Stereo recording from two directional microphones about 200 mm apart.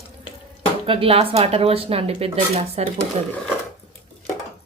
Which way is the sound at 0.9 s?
25° right (ahead or behind).